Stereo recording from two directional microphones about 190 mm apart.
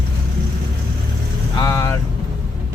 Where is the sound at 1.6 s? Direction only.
15° left (ahead or behind).